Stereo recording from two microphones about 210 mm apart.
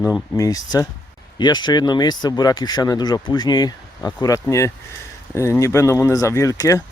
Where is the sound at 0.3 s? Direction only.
15° left (ahead or behind).